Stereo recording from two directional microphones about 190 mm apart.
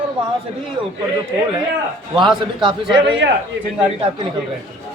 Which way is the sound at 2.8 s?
5° right (ahead or behind).